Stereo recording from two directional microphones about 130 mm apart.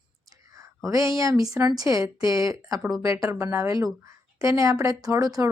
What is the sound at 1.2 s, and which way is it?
Speech, 25° right (ahead or behind).